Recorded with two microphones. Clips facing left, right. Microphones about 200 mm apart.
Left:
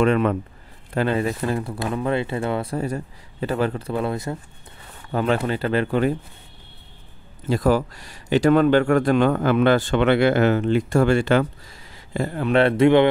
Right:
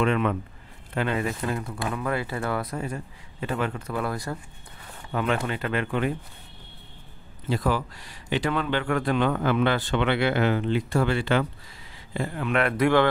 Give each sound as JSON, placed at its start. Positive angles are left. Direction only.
{"t": 0.0, "sound": "speech", "side_deg": 40}
{"t": 5.1, "sound": "speech", "side_deg": 35}
{"t": 7.4, "sound": "a man's voice", "side_deg": 45}